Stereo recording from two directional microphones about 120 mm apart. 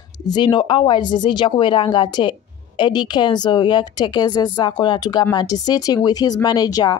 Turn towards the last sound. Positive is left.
turn(degrees=35)  # may be behind; listen again after turning